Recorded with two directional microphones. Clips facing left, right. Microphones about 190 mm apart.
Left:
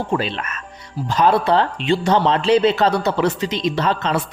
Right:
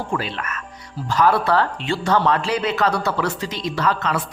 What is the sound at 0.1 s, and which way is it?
Speech, 25° left (ahead or behind).